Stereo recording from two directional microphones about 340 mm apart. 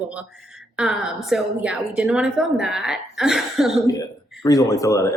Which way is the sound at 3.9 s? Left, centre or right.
Centre.